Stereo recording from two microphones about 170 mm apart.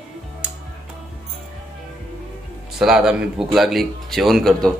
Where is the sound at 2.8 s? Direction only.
5° right (ahead or behind).